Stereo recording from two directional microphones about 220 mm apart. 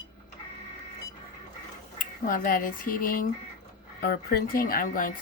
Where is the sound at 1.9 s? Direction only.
40° left (ahead or behind).